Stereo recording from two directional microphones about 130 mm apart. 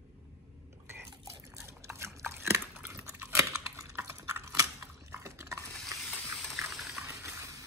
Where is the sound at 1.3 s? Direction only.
20° right (ahead or behind).